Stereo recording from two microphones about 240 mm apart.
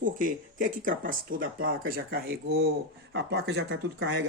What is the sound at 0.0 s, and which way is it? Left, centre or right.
Speech, right.